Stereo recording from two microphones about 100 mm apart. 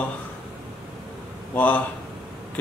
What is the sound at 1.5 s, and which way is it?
Speech, 15° left (ahead or behind).